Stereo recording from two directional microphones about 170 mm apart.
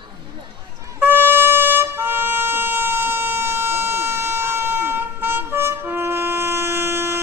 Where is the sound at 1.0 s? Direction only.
10° right (ahead or behind).